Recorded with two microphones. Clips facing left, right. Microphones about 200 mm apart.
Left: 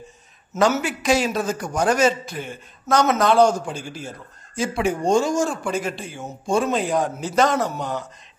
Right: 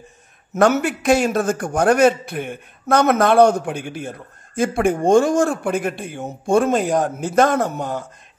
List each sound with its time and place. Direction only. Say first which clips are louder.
0.6 s a man's voice: right 4 dB; 55° right (ahead or behind)